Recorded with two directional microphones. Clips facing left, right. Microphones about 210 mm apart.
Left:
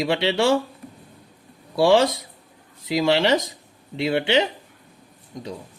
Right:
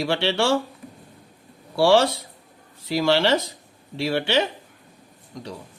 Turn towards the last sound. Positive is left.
turn(degrees=20)  # may be behind; listen again after turning